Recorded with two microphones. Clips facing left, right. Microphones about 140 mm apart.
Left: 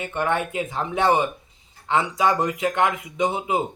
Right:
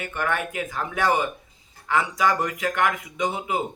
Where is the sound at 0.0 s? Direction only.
25° left (ahead or behind).